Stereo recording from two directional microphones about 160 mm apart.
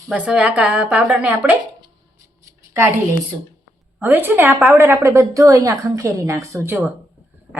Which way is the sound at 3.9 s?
10° right (ahead or behind).